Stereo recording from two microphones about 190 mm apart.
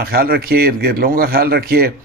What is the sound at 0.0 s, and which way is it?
A man's voice, 55° right (ahead or behind).